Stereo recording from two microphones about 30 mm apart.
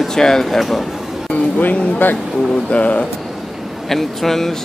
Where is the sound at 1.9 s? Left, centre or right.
Left.